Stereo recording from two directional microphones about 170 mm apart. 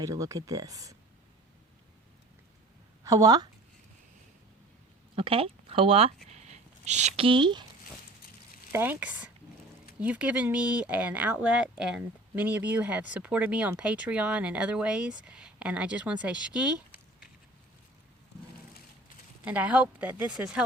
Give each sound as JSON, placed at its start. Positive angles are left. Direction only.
{"t": 0.0, "sound": "speech", "side_deg": -20}
{"t": 3.0, "sound": "speech", "side_deg": -20}
{"t": 5.1, "sound": "speech", "side_deg": -35}
{"t": 6.2, "sound": "a sound", "side_deg": -40}
{"t": 8.7, "sound": "speech", "side_deg": -10}
{"t": 19.5, "sound": "speech", "side_deg": -5}